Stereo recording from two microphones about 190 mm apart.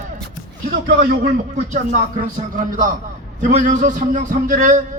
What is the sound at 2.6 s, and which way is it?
A man's voice, 45° right (ahead or behind).